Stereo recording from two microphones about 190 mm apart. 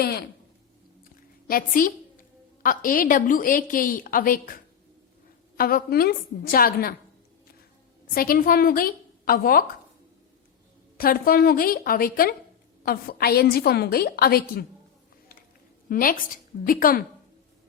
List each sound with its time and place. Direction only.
0.0 s speech: 55° left (ahead or behind)
1.5 s a woman's voice: 50° left (ahead or behind)
8.1 s a woman's voice: 50° left (ahead or behind)
10.9 s a woman's voice: 50° left (ahead or behind)
15.9 s a woman's voice: 45° left (ahead or behind)